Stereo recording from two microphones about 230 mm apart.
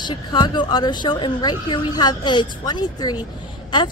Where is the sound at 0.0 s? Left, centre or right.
Centre.